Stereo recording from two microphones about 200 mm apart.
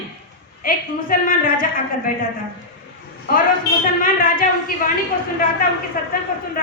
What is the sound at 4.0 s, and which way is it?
Speech, 45° left (ahead or behind).